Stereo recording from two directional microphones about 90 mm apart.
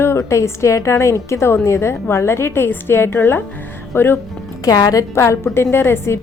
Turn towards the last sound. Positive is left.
turn(degrees=25)  # may be behind; listen again after turning